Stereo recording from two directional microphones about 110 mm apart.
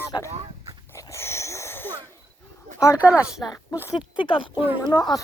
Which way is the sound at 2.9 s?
10° right (ahead or behind).